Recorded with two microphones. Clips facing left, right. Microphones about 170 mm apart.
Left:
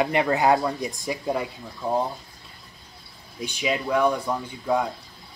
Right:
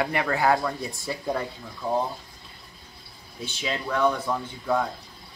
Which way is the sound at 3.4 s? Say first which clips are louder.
Left 4 dB; 15° left (ahead or behind).